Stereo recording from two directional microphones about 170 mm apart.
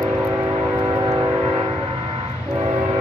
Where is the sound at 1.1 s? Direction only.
20° right (ahead or behind).